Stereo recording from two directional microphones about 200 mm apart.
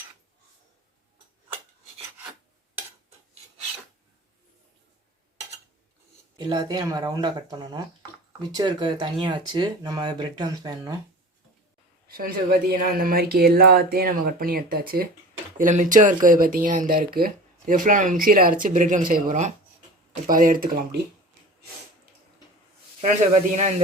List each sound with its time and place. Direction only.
6.4 s speech: 20° right (ahead or behind)
12.0 s a sound: 50° right (ahead or behind)
12.7 s speech: 45° right (ahead or behind)
23.0 s speech: 40° right (ahead or behind)